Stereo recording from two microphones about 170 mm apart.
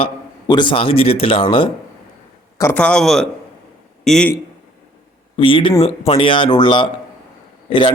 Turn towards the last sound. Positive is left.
turn(degrees=30)  # may be behind; listen again after turning